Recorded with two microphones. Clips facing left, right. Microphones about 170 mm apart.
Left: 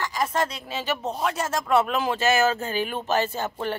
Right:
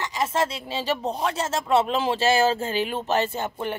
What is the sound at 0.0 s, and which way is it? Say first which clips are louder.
A woman's voice: right 1 dB; 25° right (ahead or behind).